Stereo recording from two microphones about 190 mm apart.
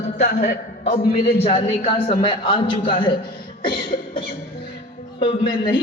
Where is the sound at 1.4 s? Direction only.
30° left (ahead or behind).